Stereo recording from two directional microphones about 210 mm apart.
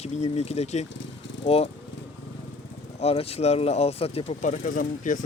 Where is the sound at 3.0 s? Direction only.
30° left (ahead or behind).